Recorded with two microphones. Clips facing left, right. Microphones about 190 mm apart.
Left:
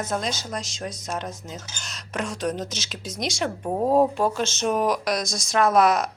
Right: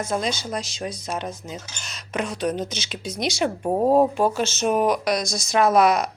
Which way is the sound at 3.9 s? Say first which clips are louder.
Right 1 dB; centre (ahead or behind).